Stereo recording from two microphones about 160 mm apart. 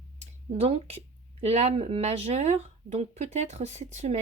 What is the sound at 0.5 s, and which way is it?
Speech, 40° right (ahead or behind).